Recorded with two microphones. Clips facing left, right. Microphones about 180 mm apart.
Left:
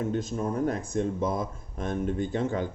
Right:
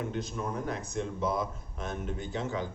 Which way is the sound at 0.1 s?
45° left (ahead or behind).